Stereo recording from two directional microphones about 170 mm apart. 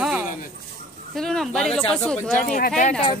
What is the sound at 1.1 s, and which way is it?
Speech, centre (ahead or behind).